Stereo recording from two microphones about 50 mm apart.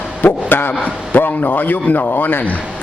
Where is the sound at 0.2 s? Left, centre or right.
Left.